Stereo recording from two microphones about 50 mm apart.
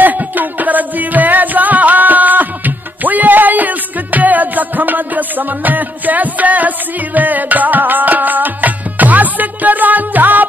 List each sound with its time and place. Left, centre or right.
0.0 s music: right